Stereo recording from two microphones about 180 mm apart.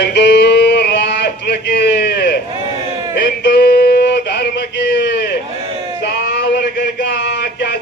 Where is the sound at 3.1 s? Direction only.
70° left (ahead or behind).